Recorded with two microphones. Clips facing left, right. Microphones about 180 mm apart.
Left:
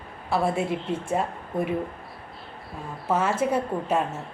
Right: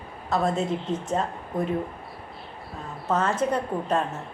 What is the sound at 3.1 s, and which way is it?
Speech, 10° left (ahead or behind).